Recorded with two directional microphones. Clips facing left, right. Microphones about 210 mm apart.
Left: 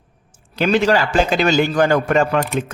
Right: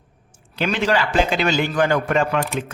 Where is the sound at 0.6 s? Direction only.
40° left (ahead or behind).